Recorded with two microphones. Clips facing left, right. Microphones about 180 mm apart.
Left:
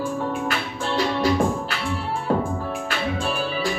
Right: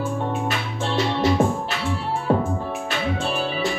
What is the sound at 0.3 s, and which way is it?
Music, 25° right (ahead or behind).